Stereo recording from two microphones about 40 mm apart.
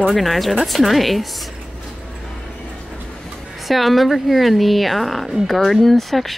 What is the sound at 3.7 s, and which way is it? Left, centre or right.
Speech, centre.